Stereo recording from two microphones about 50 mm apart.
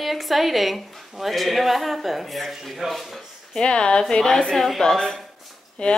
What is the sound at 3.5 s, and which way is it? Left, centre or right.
Speech, centre.